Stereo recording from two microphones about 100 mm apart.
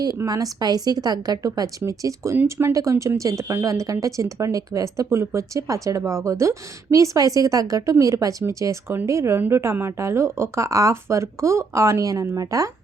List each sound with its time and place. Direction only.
0.3 s a woman's voice: 40° right (ahead or behind)